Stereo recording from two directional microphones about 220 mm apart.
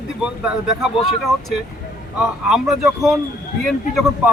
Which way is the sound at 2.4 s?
Centre (ahead or behind).